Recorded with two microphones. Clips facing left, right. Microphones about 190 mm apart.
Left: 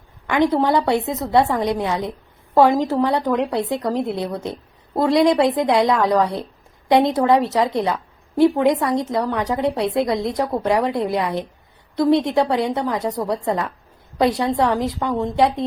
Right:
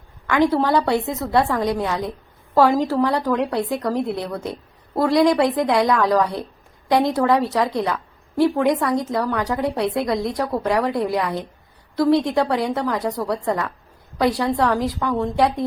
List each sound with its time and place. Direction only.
0.3 s a woman's voice: 20° left (ahead or behind)